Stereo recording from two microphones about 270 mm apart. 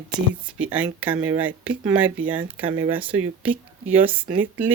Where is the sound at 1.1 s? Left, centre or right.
Right.